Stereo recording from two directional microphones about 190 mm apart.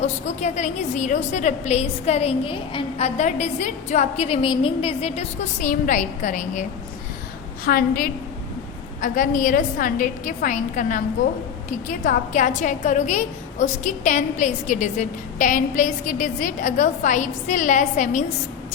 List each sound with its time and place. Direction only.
0.0 s a woman's voice: 35° left (ahead or behind)